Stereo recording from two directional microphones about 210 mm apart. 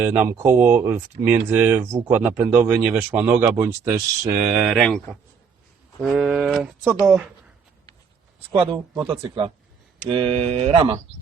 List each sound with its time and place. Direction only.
0.0 s speech: 10° right (ahead or behind)
8.5 s speech: 25° right (ahead or behind)